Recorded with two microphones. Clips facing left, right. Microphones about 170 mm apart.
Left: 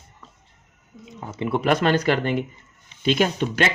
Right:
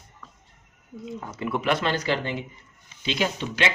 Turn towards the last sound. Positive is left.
turn(degrees=50)  # may be behind; listen again after turning